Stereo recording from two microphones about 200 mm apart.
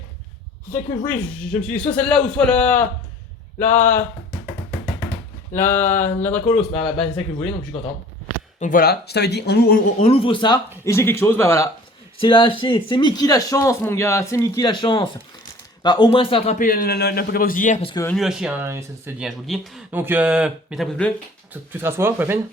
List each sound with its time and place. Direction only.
0.7 s speech: 10° left (ahead or behind)
5.5 s speech: 10° left (ahead or behind)
8.5 s a man's voice: 40° left (ahead or behind)
10.0 s a man's voice: 30° left (ahead or behind)
10.8 s speech: 15° left (ahead or behind)
12.2 s a man's voice: 25° left (ahead or behind)
16.6 s a man's voice: 45° left (ahead or behind)
18.0 s speech: centre (ahead or behind)
21.5 s speech: 10° right (ahead or behind)